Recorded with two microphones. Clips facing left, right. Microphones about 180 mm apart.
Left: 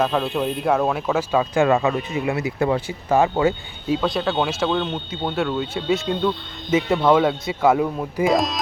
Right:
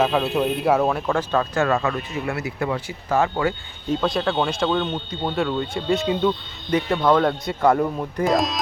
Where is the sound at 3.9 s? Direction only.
Centre (ahead or behind).